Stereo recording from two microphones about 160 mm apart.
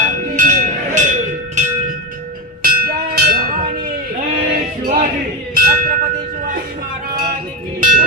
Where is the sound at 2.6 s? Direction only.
65° right (ahead or behind).